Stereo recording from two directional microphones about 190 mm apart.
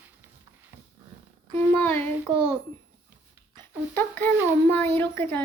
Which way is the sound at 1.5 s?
10° left (ahead or behind).